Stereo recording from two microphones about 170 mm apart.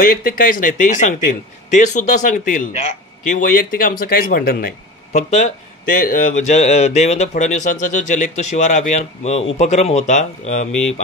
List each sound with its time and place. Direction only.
0.0 s speech: 55° left (ahead or behind)